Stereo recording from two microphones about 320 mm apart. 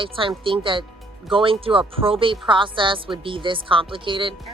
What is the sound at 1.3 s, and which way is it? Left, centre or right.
Speech, centre.